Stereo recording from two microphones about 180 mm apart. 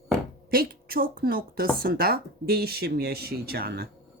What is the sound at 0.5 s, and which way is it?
A woman's voice, 55° right (ahead or behind).